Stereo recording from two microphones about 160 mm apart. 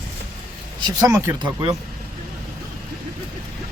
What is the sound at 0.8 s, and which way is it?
Speech, 25° right (ahead or behind).